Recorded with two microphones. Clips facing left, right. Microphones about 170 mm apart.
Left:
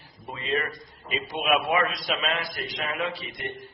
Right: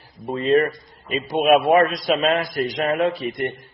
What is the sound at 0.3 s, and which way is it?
A man's voice, 40° right (ahead or behind).